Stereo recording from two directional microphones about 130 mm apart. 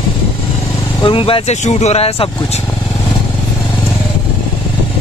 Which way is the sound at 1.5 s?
60° left (ahead or behind).